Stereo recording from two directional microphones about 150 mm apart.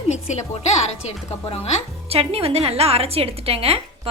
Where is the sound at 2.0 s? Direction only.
40° right (ahead or behind).